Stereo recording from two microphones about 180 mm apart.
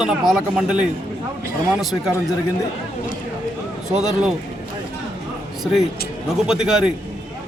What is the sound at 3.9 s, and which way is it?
Speech, 5° right (ahead or behind).